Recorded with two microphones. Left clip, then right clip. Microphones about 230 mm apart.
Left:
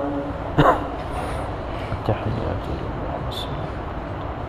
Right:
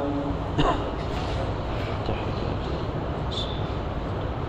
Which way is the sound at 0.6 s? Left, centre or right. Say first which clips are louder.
Left 8 dB; left.